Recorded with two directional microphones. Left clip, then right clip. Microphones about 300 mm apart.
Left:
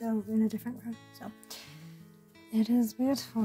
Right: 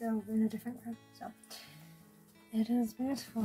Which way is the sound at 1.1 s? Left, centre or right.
Left.